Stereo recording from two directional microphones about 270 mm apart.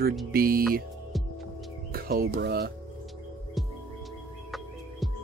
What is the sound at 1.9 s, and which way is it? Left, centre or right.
Speech, right.